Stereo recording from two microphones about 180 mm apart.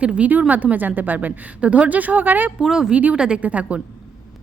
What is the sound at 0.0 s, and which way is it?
A woman's voice, 5° right (ahead or behind).